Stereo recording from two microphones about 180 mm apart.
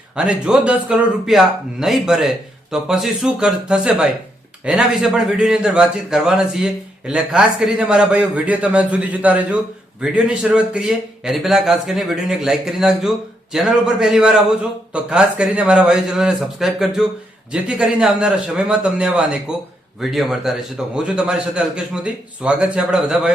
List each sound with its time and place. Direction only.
0.2 s a man's voice: 5° right (ahead or behind)